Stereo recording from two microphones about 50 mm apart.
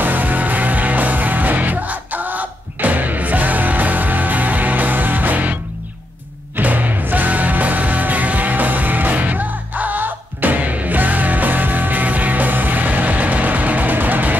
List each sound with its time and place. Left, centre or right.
0.0 s music: right